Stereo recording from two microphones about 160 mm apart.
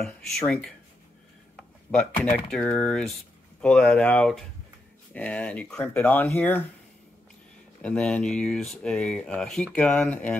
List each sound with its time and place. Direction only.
0.0 s speech: 5° left (ahead or behind)
1.6 s a sound: 5° left (ahead or behind)
2.5 s speech: 10° left (ahead or behind)
7.8 s speech: 5° left (ahead or behind)